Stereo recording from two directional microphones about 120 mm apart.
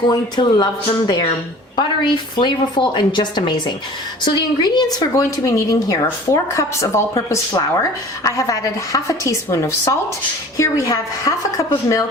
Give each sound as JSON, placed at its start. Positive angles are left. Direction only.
{"t": 0.1, "sound": "speech", "side_deg": 35}
{"t": 2.3, "sound": "speech", "side_deg": 40}